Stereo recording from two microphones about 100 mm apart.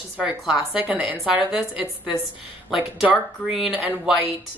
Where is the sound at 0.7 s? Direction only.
15° right (ahead or behind).